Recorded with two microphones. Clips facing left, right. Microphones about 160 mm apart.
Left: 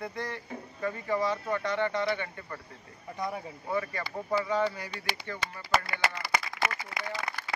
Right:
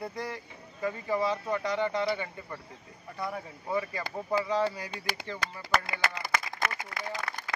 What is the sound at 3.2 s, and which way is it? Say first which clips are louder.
Speech: left 1 dB; 10° left (ahead or behind).